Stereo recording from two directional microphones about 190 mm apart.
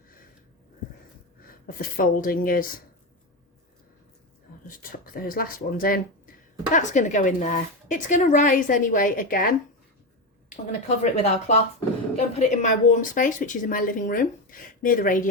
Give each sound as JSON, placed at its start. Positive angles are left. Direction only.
{"t": 1.6, "sound": "speech", "side_deg": 45}
{"t": 4.8, "sound": "speech", "side_deg": 50}
{"t": 10.7, "sound": "speech", "side_deg": 35}